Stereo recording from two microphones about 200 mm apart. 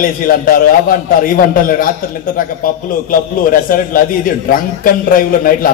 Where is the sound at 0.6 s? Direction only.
45° left (ahead or behind).